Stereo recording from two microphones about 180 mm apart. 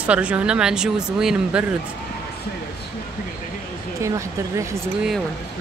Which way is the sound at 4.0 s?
15° right (ahead or behind).